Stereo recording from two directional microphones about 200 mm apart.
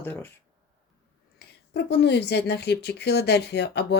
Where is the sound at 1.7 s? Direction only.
55° left (ahead or behind).